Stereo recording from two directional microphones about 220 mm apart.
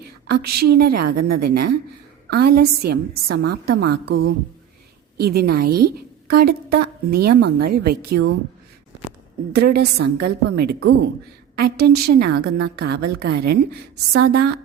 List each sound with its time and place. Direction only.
0.3 s a woman's voice: 45° right (ahead or behind)
9.6 s a woman's voice: 45° right (ahead or behind)